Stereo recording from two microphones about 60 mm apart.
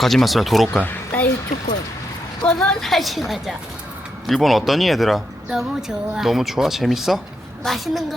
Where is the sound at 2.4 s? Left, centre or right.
Centre.